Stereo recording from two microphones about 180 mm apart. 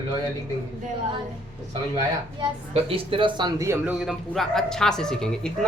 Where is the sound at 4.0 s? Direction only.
Centre (ahead or behind).